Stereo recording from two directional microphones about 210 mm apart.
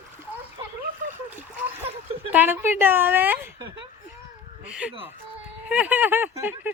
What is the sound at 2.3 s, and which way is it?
Speech, 10° right (ahead or behind).